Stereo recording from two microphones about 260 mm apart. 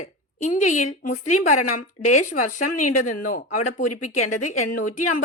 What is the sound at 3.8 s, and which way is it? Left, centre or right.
Speech, left.